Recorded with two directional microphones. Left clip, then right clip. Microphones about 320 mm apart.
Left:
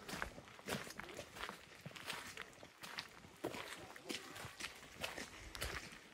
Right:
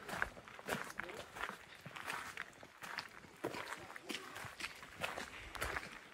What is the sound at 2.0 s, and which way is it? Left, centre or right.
Walk, centre.